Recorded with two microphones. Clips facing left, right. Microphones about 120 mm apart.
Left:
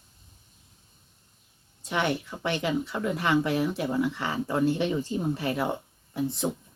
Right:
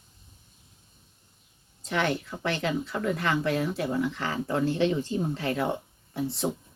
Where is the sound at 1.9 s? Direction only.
15° left (ahead or behind).